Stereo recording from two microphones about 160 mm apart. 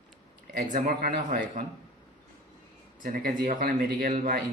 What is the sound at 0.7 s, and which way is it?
Speech, 60° right (ahead or behind).